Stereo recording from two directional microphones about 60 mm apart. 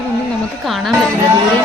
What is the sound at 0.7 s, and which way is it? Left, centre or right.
Speech, centre.